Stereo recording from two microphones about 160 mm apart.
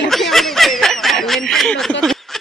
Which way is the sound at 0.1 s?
Centre (ahead or behind).